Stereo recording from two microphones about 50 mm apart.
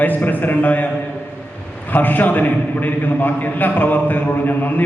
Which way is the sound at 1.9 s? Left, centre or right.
Left.